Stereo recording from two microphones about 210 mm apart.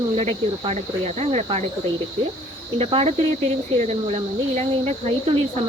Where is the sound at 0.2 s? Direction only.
30° right (ahead or behind).